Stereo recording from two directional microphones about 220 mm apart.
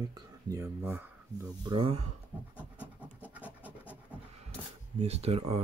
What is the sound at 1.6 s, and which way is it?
Speech, 25° right (ahead or behind).